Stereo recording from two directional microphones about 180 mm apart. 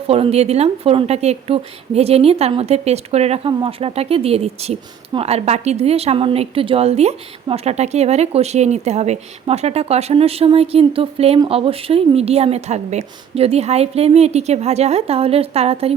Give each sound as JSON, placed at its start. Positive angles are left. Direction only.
{"t": 0.1, "sound": "speech", "side_deg": -35}